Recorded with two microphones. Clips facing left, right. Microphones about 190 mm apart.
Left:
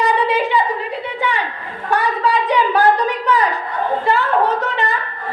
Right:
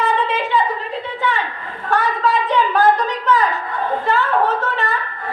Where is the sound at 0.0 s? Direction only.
15° left (ahead or behind).